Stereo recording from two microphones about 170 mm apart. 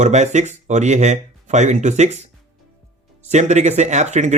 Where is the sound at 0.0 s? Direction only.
45° right (ahead or behind).